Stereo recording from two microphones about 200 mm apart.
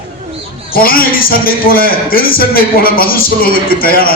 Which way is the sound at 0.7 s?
45° left (ahead or behind).